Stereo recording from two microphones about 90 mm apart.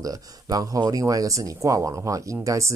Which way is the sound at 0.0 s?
45° right (ahead or behind).